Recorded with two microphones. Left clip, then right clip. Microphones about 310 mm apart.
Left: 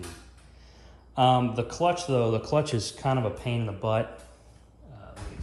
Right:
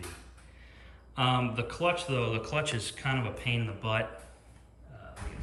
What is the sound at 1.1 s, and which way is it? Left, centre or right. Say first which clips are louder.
Speech: left 7 dB; centre.